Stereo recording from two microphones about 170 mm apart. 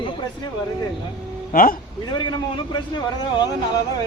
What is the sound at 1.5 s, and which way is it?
Speech, 55° left (ahead or behind).